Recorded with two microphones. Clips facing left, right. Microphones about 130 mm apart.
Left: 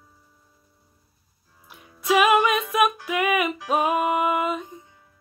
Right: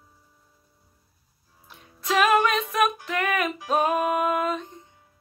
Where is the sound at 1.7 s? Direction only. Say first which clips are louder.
Left 4 dB; 10° left (ahead or behind).